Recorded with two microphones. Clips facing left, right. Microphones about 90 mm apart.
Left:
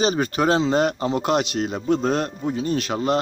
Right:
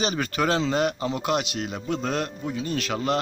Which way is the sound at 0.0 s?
30° left (ahead or behind).